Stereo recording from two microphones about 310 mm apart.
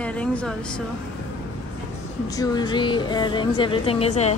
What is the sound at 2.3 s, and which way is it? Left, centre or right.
A woman's voice, centre.